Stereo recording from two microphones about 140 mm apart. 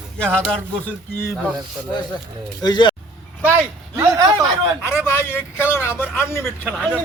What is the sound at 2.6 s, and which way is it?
Speech, 30° left (ahead or behind).